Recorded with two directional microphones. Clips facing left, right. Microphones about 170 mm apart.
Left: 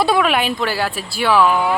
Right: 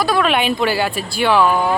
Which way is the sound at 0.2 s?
Centre (ahead or behind).